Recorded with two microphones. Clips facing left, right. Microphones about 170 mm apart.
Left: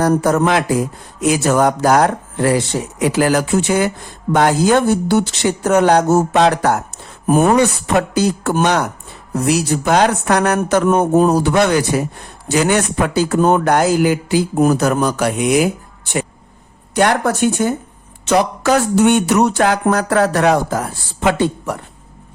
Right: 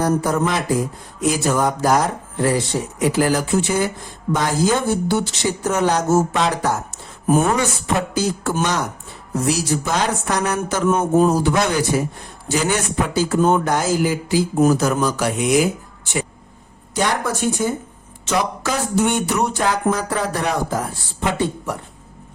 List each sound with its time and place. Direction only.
0.0 s speech: 75° left (ahead or behind)
7.9 s speech: 65° left (ahead or behind); by 21.8 s 80° left